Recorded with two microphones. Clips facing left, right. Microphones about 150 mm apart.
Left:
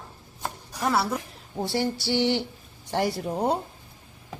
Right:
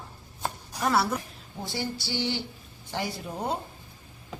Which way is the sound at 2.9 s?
60° left (ahead or behind).